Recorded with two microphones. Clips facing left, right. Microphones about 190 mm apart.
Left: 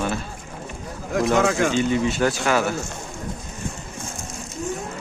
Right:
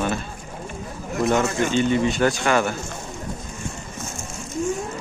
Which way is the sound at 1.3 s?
80° left.